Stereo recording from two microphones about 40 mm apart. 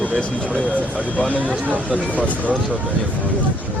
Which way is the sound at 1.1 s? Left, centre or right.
Left.